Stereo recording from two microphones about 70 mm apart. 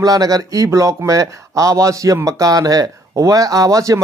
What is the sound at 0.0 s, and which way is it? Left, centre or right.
Speech, right.